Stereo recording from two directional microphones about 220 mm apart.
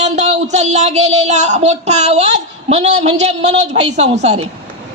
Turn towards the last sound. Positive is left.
turn(degrees=-30)  # may be behind; listen again after turning